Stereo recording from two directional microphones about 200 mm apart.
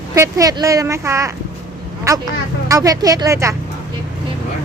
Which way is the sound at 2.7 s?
15° right (ahead or behind).